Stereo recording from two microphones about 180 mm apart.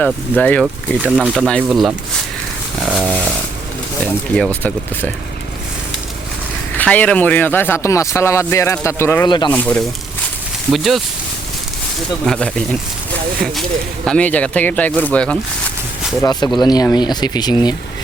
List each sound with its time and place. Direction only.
0.0 s speech: 5° left (ahead or behind)
1.0 s speech: 5° right (ahead or behind)
6.7 s speech: 10° left (ahead or behind)
12.2 s speech: 5° left (ahead or behind)
16.2 s speech: 20° left (ahead or behind)